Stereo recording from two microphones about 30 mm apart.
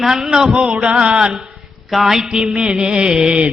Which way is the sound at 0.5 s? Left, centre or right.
Right.